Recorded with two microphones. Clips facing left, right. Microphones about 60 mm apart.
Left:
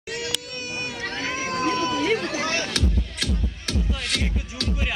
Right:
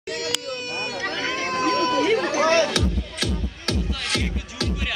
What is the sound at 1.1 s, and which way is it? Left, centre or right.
Run, centre.